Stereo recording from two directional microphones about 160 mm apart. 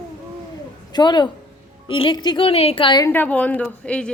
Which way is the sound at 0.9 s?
25° left (ahead or behind).